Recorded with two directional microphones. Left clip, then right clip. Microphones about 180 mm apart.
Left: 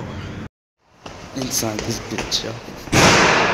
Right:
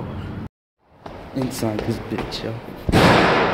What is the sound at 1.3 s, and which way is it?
Speech, 15° right (ahead or behind).